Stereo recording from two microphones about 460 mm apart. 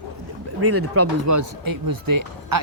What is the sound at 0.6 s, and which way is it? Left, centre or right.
Speech, right.